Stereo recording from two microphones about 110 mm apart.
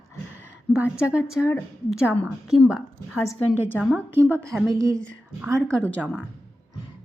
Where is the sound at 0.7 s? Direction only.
10° right (ahead or behind).